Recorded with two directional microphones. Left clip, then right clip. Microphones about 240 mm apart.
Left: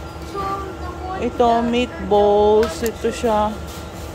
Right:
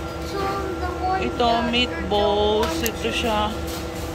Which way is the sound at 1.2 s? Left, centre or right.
Left.